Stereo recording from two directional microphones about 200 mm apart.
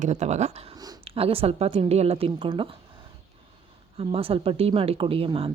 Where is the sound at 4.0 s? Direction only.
30° right (ahead or behind).